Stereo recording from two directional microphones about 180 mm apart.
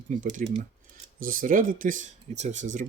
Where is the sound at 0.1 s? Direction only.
45° right (ahead or behind).